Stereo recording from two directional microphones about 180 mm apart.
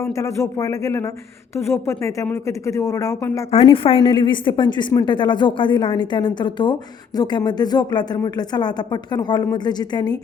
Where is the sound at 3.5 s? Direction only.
30° left (ahead or behind).